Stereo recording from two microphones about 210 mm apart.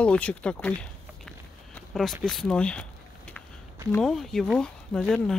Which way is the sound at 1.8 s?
Centre (ahead or behind).